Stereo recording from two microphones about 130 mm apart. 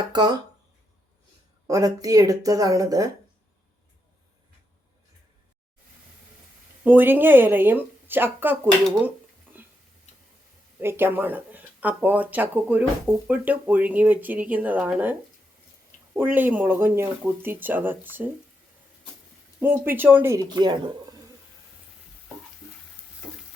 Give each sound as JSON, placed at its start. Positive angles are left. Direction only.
{"t": 0.1, "sound": "speech", "side_deg": -35}
{"t": 1.6, "sound": "speech", "side_deg": -25}
{"t": 6.8, "sound": "speech", "side_deg": -15}
{"t": 10.8, "sound": "speech", "side_deg": -15}
{"t": 16.1, "sound": "speech", "side_deg": -15}
{"t": 19.5, "sound": "speech", "side_deg": -15}
{"t": 20.5, "sound": "speech", "side_deg": -35}